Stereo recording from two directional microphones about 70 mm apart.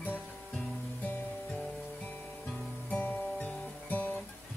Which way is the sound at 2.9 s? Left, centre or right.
Left.